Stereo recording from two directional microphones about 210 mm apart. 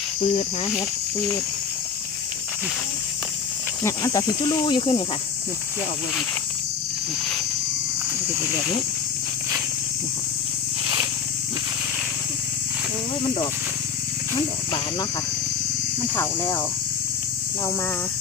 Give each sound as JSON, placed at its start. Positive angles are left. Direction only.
{"t": 0.2, "sound": "speech", "side_deg": 30}
{"t": 3.8, "sound": "speech", "side_deg": 15}
{"t": 16.0, "sound": "speech", "side_deg": 10}